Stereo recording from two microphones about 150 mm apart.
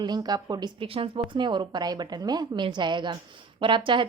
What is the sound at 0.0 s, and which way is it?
A woman's voice, 30° right (ahead or behind).